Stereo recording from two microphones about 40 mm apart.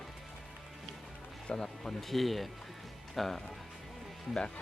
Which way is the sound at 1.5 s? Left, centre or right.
Centre.